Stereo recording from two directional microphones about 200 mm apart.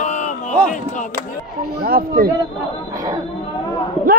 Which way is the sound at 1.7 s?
50° right (ahead or behind).